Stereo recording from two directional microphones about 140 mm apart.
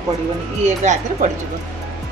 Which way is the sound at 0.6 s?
60° right (ahead or behind).